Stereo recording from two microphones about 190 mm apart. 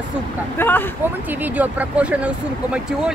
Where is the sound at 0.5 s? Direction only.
10° left (ahead or behind).